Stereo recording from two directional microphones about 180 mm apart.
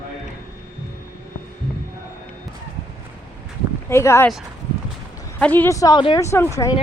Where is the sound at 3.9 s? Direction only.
15° left (ahead or behind).